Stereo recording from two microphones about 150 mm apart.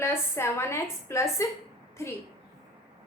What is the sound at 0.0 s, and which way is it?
A woman's voice, 15° left (ahead or behind).